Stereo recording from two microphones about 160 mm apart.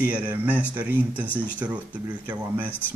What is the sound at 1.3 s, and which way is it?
Speech, 10° left (ahead or behind).